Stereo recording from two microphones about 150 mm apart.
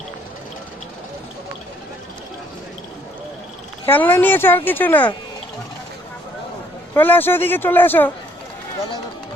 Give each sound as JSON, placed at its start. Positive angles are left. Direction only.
{"t": 3.8, "sound": "a woman's voice", "side_deg": 15}
{"t": 6.9, "sound": "a woman's voice", "side_deg": 15}